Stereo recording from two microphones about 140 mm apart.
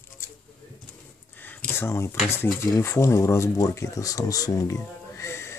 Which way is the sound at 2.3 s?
20° left (ahead or behind).